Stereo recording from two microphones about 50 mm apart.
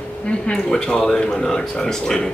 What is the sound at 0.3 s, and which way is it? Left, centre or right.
A woman's voice, centre.